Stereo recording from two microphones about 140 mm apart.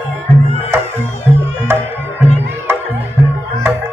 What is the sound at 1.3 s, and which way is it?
Music, 15° right (ahead or behind).